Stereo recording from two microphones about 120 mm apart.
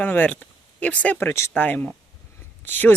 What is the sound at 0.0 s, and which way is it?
Speech, 15° left (ahead or behind).